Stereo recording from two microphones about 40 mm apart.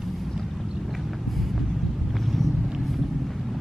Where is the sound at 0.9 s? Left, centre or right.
Centre.